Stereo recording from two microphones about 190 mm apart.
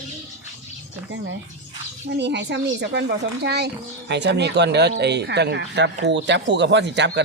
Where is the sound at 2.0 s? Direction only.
65° right (ahead or behind).